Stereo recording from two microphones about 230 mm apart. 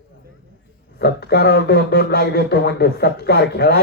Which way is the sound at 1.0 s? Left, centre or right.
Left.